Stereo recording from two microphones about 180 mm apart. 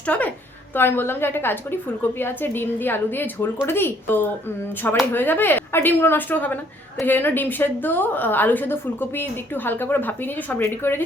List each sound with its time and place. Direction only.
0.1 s a woman's voice: 10° left (ahead or behind)